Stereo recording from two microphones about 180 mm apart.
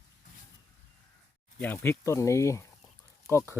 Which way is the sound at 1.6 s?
10° left (ahead or behind).